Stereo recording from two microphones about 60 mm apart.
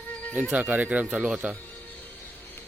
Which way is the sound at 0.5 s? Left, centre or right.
Right.